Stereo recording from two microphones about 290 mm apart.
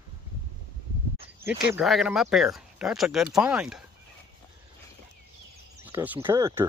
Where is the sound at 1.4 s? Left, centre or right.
Centre.